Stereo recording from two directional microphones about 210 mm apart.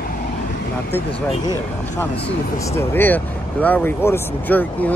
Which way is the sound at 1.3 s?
20° left (ahead or behind).